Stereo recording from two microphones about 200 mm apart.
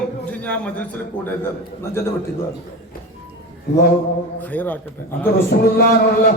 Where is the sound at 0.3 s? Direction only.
5° left (ahead or behind).